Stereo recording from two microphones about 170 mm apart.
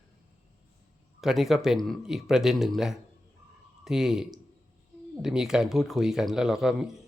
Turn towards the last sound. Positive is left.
turn(degrees=0)  # may be behind; listen again after turning